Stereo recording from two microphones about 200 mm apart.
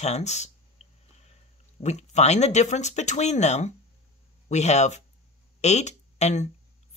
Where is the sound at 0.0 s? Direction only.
35° left (ahead or behind).